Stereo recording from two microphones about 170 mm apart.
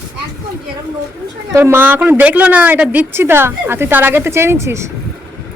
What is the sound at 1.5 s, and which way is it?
A woman's voice, 15° right (ahead or behind).